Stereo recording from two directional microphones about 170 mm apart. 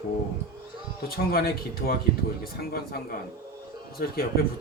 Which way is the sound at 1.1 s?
60° left (ahead or behind).